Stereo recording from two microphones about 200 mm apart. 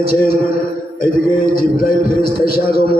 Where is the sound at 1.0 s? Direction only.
45° left (ahead or behind).